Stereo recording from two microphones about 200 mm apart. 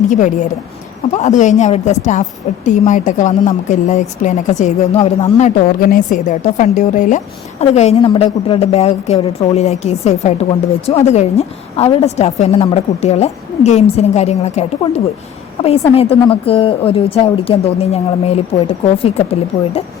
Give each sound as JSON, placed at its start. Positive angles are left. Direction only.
{"t": 1.1, "sound": "a woman's voice", "side_deg": 35}